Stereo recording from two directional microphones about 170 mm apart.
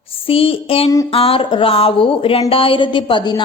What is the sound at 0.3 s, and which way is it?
A woman's voice, 35° left (ahead or behind).